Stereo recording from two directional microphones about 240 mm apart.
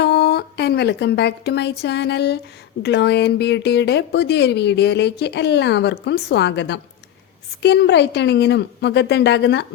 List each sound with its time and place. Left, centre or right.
0.0 s a woman's voice: left